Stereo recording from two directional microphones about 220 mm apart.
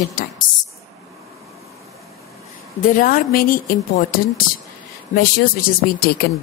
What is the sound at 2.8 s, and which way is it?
Speech, 40° left (ahead or behind).